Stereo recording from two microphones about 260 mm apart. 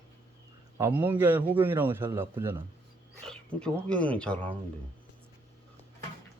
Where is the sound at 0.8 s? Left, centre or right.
Centre.